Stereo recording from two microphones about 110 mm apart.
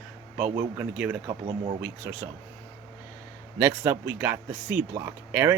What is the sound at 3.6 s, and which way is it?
Speech, 20° right (ahead or behind).